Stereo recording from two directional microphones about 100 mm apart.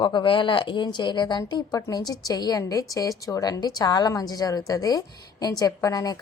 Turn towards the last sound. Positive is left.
turn(degrees=40)  # may be behind; listen again after turning